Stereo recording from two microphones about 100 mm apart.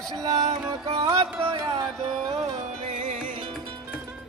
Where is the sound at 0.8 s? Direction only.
75° right (ahead or behind).